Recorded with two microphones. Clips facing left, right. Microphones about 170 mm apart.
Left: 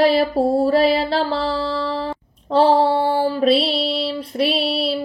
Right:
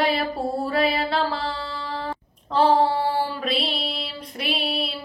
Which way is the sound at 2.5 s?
30° left (ahead or behind).